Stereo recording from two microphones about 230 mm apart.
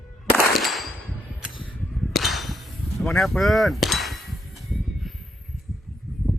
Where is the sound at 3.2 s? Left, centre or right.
Centre.